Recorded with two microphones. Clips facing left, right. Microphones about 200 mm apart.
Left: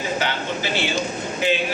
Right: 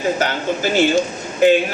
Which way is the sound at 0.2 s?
45° right (ahead or behind).